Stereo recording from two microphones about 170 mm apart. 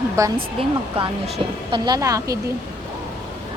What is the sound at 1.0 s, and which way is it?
A woman's voice, 35° right (ahead or behind).